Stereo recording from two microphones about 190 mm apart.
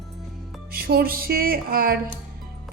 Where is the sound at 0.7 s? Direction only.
50° right (ahead or behind).